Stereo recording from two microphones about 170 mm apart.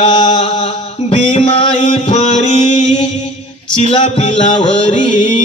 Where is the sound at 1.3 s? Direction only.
35° left (ahead or behind).